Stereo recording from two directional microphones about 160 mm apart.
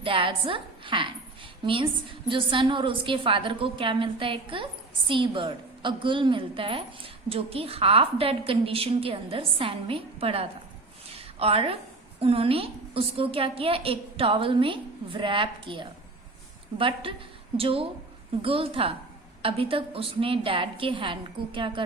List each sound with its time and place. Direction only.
0.0 s a woman's voice: 35° right (ahead or behind)
11.1 s a sound: 40° right (ahead or behind)
12.2 s a woman's voice: 35° right (ahead or behind)